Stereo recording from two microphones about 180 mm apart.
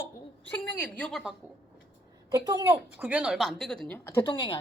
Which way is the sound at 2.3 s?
20° right (ahead or behind).